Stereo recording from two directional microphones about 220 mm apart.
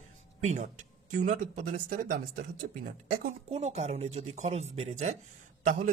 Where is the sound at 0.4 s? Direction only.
30° right (ahead or behind).